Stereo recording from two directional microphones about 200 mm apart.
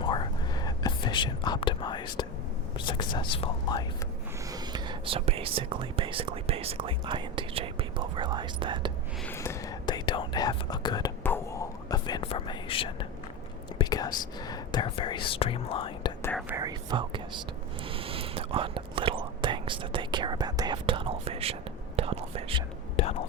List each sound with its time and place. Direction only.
0.0 s whispering: 20° left (ahead or behind)
2.7 s speech: 25° left (ahead or behind)
4.5 s speech: 20° right (ahead or behind)
9.2 s speech: 10° left (ahead or behind)
11.2 s whispering: 10° left (ahead or behind)
13.7 s speech: 20° left (ahead or behind)
16.5 s speech: 15° right (ahead or behind)
17.8 s whispering: 25° right (ahead or behind)
23.0 s whispering: 30° left (ahead or behind)